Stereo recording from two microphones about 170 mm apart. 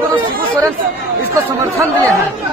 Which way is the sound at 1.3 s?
20° right (ahead or behind).